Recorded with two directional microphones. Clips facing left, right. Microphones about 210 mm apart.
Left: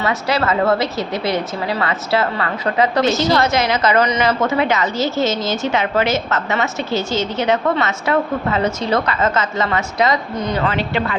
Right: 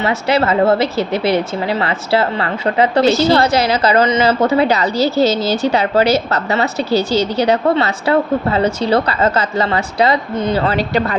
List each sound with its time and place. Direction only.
0.0 s speech: 25° right (ahead or behind)